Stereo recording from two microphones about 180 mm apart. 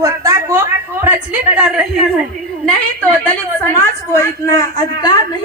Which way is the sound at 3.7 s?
15° left (ahead or behind).